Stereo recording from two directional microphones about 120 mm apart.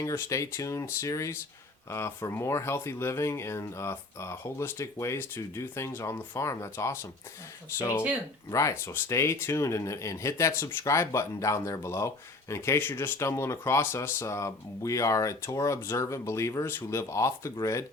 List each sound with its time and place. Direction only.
0.0 s speech: 25° left (ahead or behind)
8.4 s speech: 25° left (ahead or behind)